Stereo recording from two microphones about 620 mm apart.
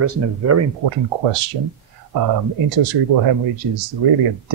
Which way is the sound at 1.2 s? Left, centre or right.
Right.